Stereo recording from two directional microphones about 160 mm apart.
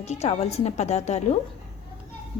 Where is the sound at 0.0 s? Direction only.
45° left (ahead or behind).